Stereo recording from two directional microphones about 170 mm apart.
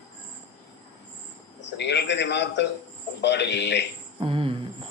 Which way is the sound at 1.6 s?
85° left.